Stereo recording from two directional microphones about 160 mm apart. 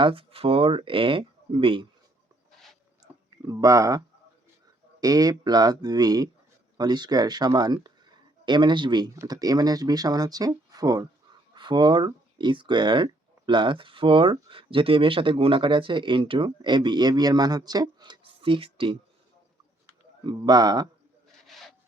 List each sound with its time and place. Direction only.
0.0 s speech: 35° right (ahead or behind)
3.2 s speech: 20° right (ahead or behind)
20.2 s speech: 25° right (ahead or behind)